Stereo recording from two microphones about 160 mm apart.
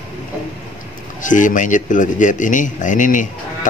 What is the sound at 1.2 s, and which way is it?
Speech, 55° left (ahead or behind).